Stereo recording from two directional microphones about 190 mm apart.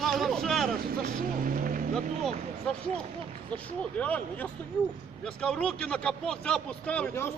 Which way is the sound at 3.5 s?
5° left (ahead or behind).